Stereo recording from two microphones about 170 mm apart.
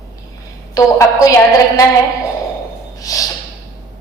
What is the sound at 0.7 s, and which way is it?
Speech, 20° left (ahead or behind).